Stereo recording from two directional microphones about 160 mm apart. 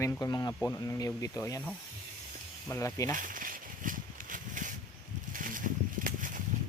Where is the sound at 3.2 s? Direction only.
55° right (ahead or behind).